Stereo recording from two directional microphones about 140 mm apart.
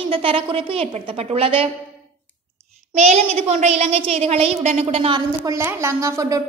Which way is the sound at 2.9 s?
55° right (ahead or behind).